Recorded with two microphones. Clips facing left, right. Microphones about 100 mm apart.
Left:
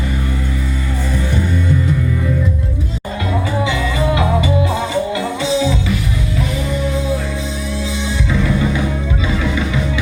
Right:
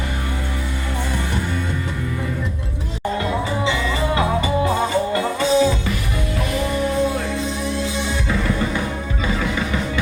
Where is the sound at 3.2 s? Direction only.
30° right (ahead or behind); by 5.7 s 45° right (ahead or behind).